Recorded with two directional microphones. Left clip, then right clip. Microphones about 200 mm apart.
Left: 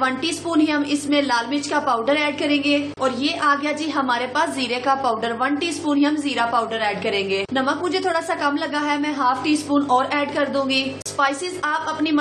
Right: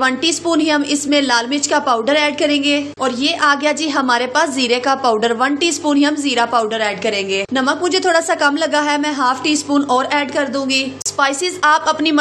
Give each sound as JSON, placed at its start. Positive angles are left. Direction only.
{"t": 0.0, "sound": "a woman's voice", "side_deg": -40}